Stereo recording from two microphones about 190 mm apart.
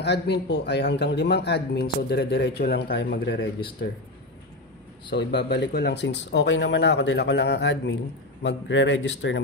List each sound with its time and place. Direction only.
0.0 s speech: 60° left (ahead or behind)
5.1 s a man's voice: 65° left (ahead or behind)